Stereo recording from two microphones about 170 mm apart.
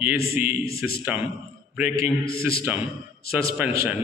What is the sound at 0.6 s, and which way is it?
Speech, 65° left (ahead or behind).